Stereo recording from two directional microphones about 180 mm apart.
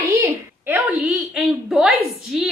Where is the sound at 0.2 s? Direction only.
10° right (ahead or behind).